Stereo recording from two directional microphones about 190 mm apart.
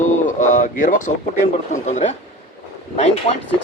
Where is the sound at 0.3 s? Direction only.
40° left (ahead or behind).